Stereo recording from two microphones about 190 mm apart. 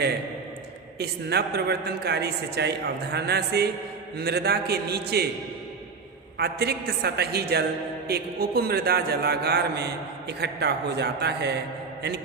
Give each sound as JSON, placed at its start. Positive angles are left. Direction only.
{"t": 0.9, "sound": "a man's voice", "side_deg": -60}
{"t": 6.4, "sound": "a man's voice", "side_deg": -60}